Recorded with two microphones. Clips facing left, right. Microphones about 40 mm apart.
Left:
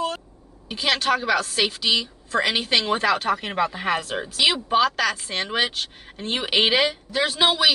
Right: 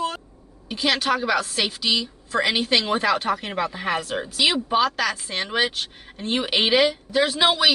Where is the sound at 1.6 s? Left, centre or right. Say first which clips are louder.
Left 1 dB; centre.